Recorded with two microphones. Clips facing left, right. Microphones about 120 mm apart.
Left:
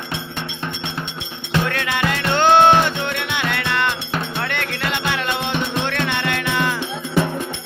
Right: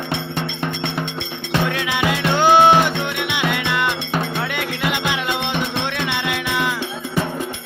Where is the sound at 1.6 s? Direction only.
5° right (ahead or behind).